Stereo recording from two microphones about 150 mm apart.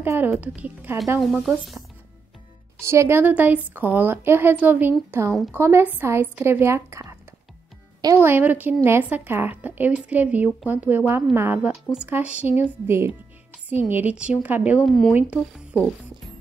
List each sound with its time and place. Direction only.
0.0 s a woman's voice: 15° right (ahead or behind)
1.2 s speech: 5° right (ahead or behind)
2.8 s a woman's voice: 20° right (ahead or behind)